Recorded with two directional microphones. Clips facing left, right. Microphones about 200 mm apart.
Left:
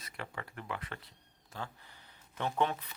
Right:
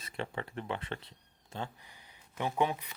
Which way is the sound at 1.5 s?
20° right (ahead or behind).